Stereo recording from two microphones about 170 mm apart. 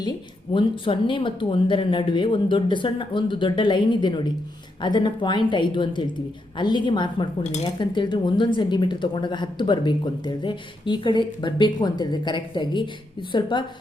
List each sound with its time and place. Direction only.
0.5 s speech: 30° left (ahead or behind)